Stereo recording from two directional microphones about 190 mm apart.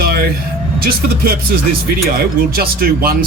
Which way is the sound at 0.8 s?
50° right (ahead or behind).